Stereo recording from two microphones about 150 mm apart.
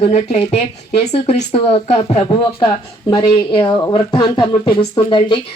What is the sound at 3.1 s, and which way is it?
Speech, 30° left (ahead or behind).